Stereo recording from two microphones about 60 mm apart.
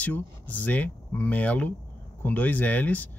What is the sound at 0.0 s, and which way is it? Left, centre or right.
Speech, left.